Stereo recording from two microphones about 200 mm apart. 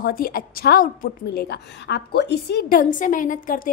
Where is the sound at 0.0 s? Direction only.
45° left (ahead or behind).